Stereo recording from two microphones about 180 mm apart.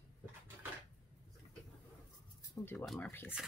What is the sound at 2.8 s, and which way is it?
Speech, centre (ahead or behind).